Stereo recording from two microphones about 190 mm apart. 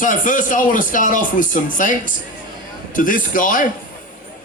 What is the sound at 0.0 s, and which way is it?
A man's voice, 45° left (ahead or behind).